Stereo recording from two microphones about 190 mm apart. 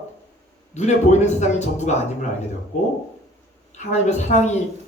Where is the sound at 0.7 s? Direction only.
35° left (ahead or behind).